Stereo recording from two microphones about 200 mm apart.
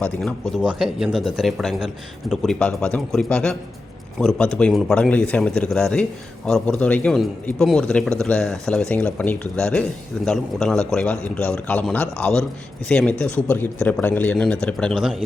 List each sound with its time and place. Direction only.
0.0 s speech: 5° left (ahead or behind)